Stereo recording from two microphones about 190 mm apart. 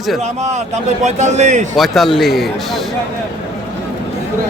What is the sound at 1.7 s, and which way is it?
Speech, centre (ahead or behind).